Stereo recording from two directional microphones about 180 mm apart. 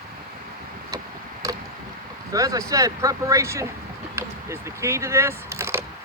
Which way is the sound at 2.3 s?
20° right (ahead or behind).